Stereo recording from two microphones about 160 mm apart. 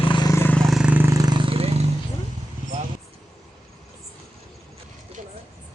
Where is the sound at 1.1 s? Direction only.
25° right (ahead or behind).